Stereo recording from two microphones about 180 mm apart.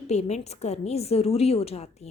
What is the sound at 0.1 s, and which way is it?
Speech, 35° left (ahead or behind).